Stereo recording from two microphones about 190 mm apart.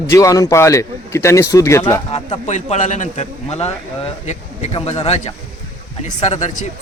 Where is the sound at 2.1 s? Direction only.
35° left (ahead or behind).